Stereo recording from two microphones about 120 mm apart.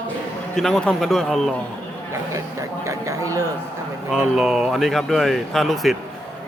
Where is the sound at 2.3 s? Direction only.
25° right (ahead or behind).